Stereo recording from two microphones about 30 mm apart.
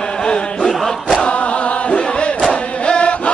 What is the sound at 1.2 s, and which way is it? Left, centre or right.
Choir, left.